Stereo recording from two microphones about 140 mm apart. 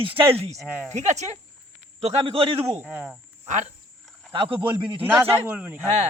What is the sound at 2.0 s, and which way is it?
Cricket, 45° right (ahead or behind).